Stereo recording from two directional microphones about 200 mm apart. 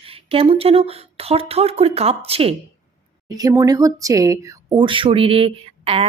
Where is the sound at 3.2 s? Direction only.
15° right (ahead or behind).